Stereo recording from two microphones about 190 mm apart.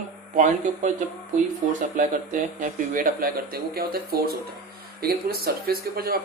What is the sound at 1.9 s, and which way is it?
Speech, 45° right (ahead or behind).